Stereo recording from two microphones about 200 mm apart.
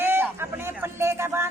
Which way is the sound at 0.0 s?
10° right (ahead or behind).